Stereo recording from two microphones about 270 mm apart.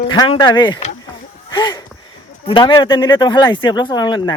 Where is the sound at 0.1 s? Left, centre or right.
Centre.